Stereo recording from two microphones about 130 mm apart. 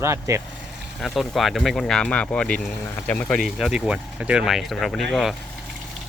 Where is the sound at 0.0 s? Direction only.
20° right (ahead or behind).